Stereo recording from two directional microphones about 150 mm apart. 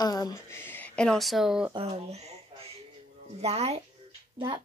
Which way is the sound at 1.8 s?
40° right (ahead or behind).